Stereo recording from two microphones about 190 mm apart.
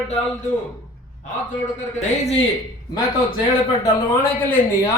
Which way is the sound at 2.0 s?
35° left (ahead or behind).